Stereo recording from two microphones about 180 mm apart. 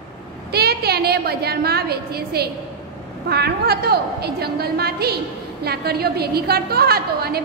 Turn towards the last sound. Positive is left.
turn(degrees=-60)  # may be behind; listen again after turning